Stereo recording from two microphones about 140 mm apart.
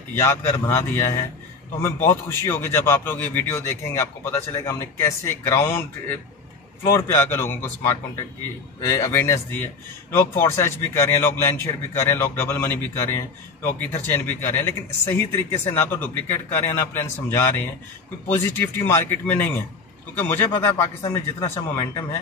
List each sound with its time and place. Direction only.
0.1 s a man's voice: 20° left (ahead or behind)